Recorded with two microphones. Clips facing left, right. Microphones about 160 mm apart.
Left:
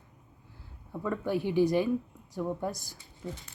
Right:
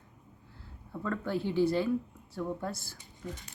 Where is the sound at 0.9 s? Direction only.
15° left (ahead or behind).